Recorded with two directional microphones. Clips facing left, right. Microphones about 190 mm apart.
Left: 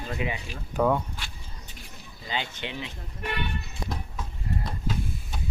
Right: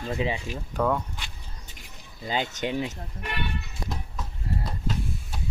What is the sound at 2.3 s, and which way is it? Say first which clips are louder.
Speech: right 5 dB; 40° right (ahead or behind).